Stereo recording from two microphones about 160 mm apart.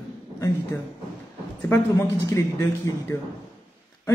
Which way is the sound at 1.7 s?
15° left (ahead or behind).